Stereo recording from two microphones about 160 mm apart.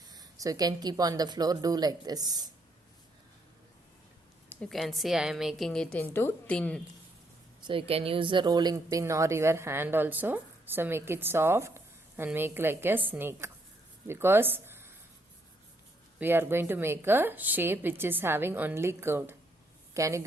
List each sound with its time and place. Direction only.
0.1 s speech: 25° right (ahead or behind)
4.4 s a woman's voice: 5° left (ahead or behind)
7.6 s a woman's voice: 35° right (ahead or behind); by 14.9 s 15° right (ahead or behind)
16.1 s a woman's voice: 15° right (ahead or behind)